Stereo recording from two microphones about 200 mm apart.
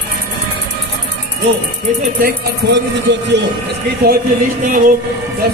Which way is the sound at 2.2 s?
60° right (ahead or behind).